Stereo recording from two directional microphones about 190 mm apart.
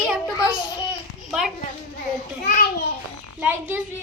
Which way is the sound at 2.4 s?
50° left (ahead or behind).